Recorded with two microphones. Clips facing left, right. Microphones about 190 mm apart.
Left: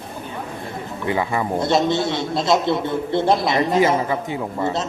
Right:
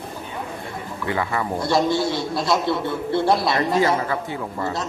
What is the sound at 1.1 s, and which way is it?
A man's voice, 20° left (ahead or behind).